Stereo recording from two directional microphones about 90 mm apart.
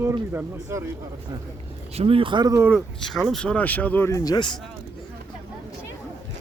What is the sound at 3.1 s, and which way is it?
Speech, 5° left (ahead or behind).